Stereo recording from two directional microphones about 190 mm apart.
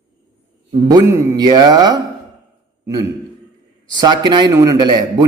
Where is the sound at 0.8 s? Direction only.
15° right (ahead or behind).